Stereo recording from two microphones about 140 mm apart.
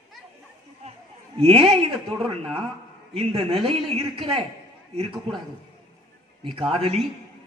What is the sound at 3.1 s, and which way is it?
Speech, 45° right (ahead or behind).